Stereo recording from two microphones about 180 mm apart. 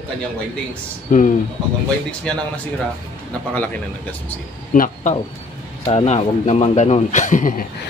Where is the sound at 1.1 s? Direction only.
45° left (ahead or behind).